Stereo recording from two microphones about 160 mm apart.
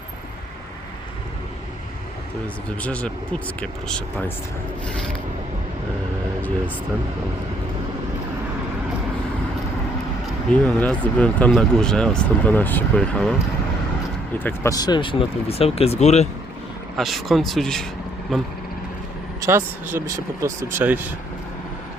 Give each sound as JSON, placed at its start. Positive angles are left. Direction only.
{"t": 2.8, "sound": "speech", "side_deg": 10}
{"t": 10.5, "sound": "speech", "side_deg": 10}
{"t": 14.3, "sound": "speech", "side_deg": 15}
{"t": 17.0, "sound": "speech", "side_deg": 0}
{"t": 19.4, "sound": "speech", "side_deg": -15}